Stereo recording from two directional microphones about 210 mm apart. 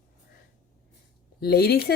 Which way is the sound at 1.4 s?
50° left (ahead or behind).